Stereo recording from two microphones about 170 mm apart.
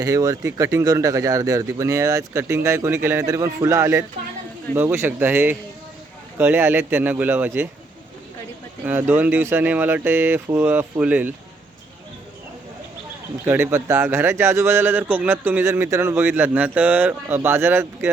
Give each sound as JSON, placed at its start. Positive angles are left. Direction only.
{"t": 0.0, "sound": "speech", "side_deg": -20}
{"t": 8.8, "sound": "speech", "side_deg": -10}
{"t": 13.4, "sound": "speech", "side_deg": -15}